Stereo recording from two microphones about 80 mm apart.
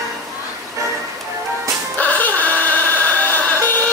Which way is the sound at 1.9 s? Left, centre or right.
Centre.